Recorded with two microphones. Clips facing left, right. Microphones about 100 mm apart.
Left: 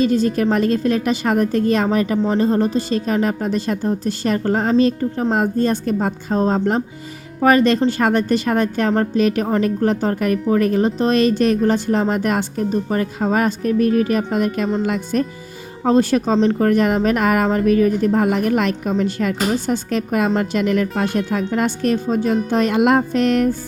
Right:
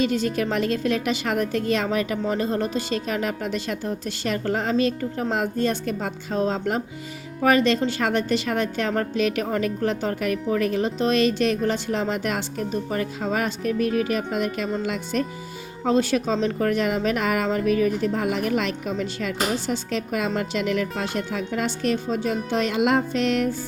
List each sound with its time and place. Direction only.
0.0 s a woman's voice: 40° left (ahead or behind)